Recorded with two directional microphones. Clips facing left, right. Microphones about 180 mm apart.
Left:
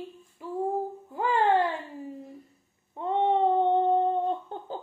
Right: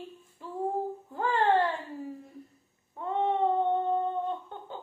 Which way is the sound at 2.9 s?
25° left (ahead or behind).